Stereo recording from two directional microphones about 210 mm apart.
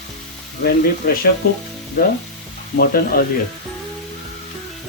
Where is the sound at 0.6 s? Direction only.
50° left (ahead or behind).